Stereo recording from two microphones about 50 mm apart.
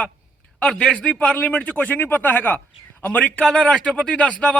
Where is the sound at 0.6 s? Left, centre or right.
Centre.